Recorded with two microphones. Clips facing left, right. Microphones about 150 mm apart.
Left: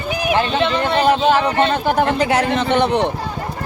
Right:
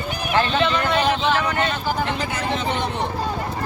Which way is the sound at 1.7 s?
55° left (ahead or behind).